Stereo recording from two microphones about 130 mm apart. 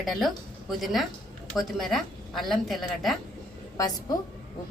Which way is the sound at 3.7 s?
30° left (ahead or behind).